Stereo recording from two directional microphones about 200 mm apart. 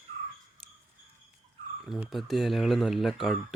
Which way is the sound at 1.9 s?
Centre (ahead or behind).